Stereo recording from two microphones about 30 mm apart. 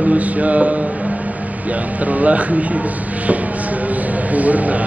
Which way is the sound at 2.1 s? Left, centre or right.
Right.